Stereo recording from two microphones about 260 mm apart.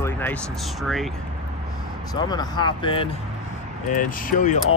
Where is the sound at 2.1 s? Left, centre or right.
Centre.